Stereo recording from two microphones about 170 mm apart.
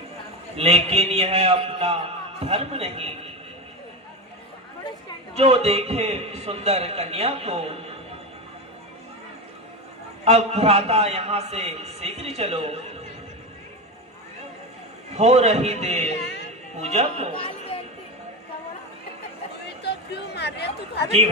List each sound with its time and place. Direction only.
0.5 s a man's voice: 35° right (ahead or behind)
5.4 s a man's voice: 35° right (ahead or behind)
10.2 s a man's voice: 40° right (ahead or behind)
15.1 s a man's voice: 40° right (ahead or behind)
16.2 s a sound: 80° left
16.7 s a man's voice: 40° right (ahead or behind)
17.3 s music: 35° left (ahead or behind)
19.8 s a sound: 80° left